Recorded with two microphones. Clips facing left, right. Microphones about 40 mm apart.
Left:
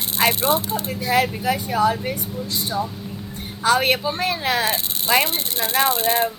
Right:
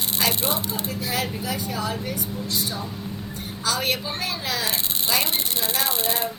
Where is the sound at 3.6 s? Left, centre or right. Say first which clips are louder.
Left 7 dB; left.